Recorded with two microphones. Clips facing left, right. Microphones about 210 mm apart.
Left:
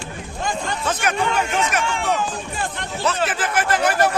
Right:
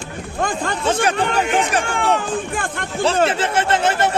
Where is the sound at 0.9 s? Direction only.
30° right (ahead or behind).